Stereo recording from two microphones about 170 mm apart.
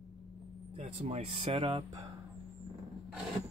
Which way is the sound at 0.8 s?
40° right (ahead or behind).